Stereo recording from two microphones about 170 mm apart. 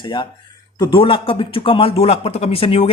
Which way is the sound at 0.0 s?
25° left (ahead or behind).